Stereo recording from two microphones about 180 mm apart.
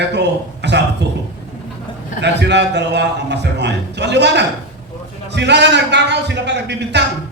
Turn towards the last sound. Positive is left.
turn(degrees=-70)  # may be behind; listen again after turning